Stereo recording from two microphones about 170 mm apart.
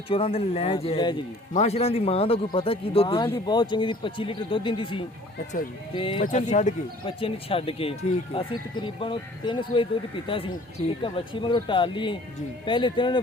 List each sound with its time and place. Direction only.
0.1 s speech: 35° left (ahead or behind)
6.2 s speech: 45° left (ahead or behind)
7.0 s speech: 30° left (ahead or behind)